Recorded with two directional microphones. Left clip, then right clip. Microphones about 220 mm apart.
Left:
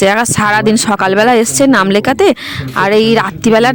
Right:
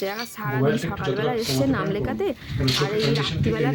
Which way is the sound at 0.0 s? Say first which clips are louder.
Left 19 dB; 45° left (ahead or behind).